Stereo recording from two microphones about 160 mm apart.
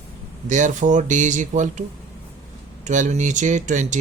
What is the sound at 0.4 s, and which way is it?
Speech, 50° right (ahead or behind).